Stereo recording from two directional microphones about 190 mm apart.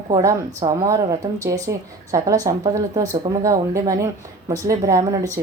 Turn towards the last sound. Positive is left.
turn(degrees=-15)  # may be behind; listen again after turning